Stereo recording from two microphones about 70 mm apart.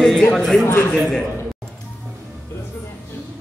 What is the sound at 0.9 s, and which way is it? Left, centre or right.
Speech, centre.